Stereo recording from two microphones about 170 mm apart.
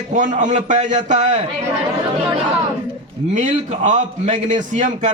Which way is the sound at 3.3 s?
45° right (ahead or behind).